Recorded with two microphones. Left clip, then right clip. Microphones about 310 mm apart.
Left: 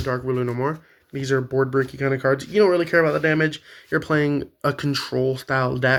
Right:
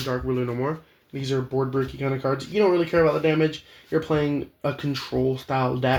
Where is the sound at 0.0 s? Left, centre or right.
Left.